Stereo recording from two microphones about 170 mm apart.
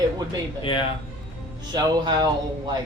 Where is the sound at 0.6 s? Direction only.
30° left (ahead or behind).